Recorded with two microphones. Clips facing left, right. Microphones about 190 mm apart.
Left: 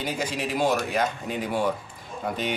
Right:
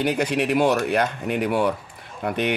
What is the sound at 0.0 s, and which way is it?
Speech, 65° right (ahead or behind).